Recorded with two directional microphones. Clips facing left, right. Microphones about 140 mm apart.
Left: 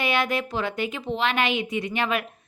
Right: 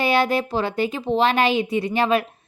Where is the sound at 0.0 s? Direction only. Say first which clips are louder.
Right 5 dB; 35° right (ahead or behind).